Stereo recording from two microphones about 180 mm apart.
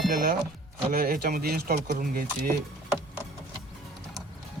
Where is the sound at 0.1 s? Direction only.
50° right (ahead or behind).